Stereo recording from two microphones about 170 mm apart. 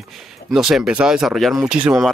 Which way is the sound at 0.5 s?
Centre (ahead or behind).